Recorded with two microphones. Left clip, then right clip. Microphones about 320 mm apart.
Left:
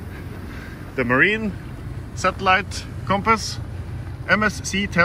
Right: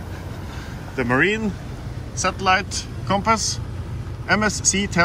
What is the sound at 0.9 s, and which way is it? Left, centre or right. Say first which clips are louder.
Speech: left 2 dB; centre.